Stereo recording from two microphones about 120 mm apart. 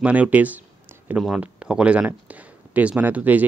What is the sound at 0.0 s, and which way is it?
Speech, 10° right (ahead or behind).